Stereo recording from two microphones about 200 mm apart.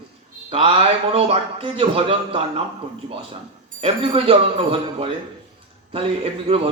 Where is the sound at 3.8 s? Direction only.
30° right (ahead or behind).